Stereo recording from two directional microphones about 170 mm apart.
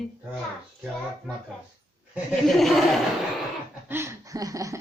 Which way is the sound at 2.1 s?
Centre (ahead or behind).